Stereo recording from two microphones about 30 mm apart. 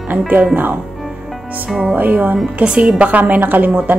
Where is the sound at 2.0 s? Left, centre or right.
Right.